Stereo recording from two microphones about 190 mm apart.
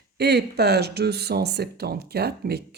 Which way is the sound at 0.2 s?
60° right (ahead or behind).